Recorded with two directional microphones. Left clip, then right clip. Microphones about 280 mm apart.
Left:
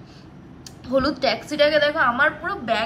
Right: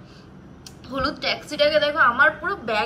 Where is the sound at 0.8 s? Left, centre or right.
Centre.